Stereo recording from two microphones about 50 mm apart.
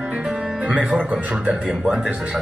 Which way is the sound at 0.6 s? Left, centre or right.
Right.